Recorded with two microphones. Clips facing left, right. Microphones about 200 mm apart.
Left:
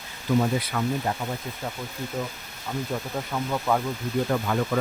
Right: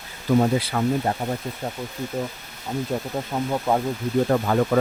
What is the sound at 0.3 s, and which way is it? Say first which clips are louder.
Speech: right 4 dB; 35° right (ahead or behind).